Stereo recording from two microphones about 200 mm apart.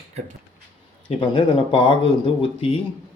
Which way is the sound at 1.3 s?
25° left (ahead or behind).